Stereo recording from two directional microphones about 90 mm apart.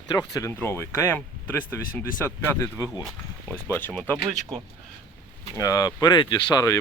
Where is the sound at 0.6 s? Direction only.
25° left (ahead or behind).